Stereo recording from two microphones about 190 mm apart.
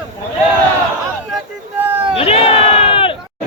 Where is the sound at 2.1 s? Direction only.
30° left (ahead or behind).